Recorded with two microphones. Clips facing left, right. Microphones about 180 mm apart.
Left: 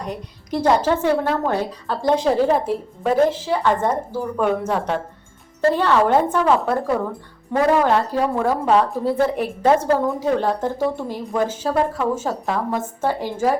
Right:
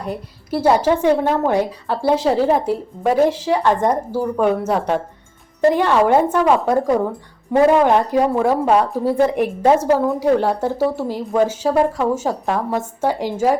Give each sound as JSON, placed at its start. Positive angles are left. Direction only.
{"t": 0.0, "sound": "a woman's voice", "side_deg": -5}